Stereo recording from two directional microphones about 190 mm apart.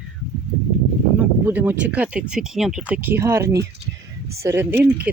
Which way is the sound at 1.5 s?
10° right (ahead or behind).